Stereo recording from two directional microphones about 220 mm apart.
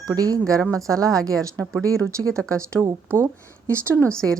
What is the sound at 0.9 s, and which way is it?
Speech, 15° right (ahead or behind).